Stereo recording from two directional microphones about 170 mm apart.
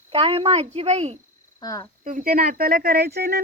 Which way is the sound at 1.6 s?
20° left (ahead or behind).